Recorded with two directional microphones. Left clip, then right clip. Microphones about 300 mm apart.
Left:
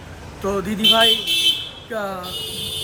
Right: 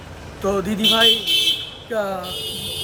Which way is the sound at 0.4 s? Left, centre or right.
Centre.